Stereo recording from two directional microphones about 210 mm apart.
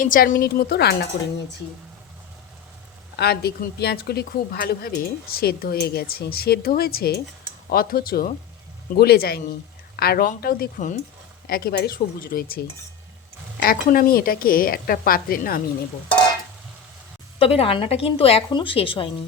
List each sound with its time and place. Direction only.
0.0 s a woman's voice: 40° left (ahead or behind)
3.2 s a woman's voice: 50° left (ahead or behind)
17.4 s a woman's voice: 25° left (ahead or behind)